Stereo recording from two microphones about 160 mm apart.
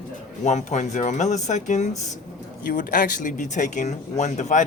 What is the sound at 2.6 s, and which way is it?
Speech, 60° left (ahead or behind).